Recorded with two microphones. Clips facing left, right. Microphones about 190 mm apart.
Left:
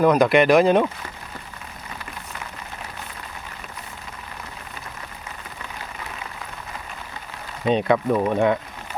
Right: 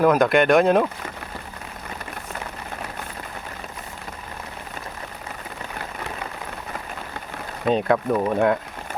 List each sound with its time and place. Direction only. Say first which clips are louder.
0.0 s speech: left 1 dB; centre (ahead or behind)
7.7 s speech: left 1 dB; centre (ahead or behind)